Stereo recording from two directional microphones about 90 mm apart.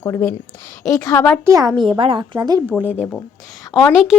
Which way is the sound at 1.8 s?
65° right (ahead or behind).